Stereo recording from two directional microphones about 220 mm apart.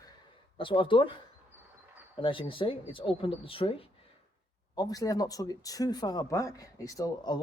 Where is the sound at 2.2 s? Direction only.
25° left (ahead or behind).